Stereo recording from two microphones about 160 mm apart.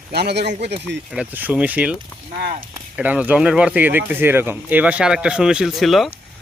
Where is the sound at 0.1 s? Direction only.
90° right.